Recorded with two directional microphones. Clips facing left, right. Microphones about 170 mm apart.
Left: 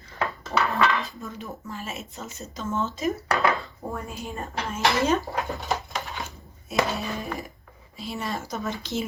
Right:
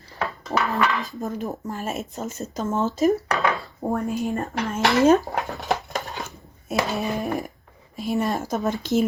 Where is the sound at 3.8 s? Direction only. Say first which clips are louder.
Right 12 dB; 75° right (ahead or behind).